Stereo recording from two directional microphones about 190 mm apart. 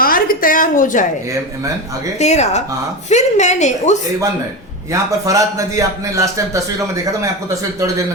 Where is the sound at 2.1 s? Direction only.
35° left (ahead or behind).